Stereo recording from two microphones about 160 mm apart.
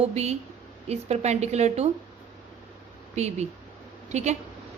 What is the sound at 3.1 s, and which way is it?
Speech, 45° right (ahead or behind).